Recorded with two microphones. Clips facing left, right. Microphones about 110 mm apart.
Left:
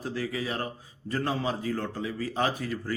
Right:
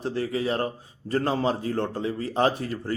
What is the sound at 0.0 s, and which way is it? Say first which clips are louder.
A man's voice: right 5 dB; 30° right (ahead or behind).